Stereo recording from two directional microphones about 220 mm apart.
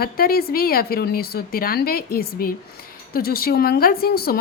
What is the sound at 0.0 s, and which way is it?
A woman's voice, 40° left (ahead or behind).